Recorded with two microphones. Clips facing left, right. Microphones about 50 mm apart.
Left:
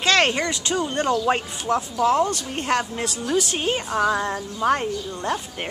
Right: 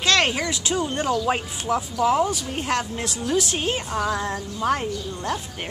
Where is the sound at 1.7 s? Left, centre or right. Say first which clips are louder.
Left 1 dB; centre.